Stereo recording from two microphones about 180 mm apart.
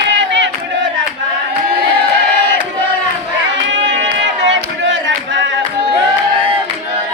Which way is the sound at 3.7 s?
90° right.